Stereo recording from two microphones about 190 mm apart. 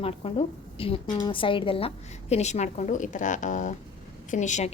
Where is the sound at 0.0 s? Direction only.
30° left (ahead or behind).